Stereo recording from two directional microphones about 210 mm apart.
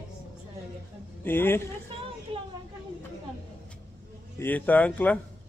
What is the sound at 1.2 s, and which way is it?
Speech, 10° left (ahead or behind).